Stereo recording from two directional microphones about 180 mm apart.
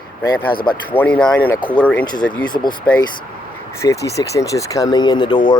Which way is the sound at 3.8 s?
15° left (ahead or behind).